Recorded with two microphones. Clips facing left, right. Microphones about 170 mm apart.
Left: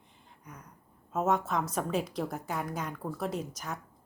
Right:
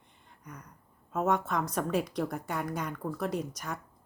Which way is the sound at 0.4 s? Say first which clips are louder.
Right 2 dB; 5° left (ahead or behind).